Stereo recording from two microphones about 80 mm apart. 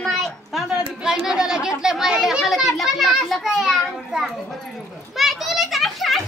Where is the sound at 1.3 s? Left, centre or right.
Centre.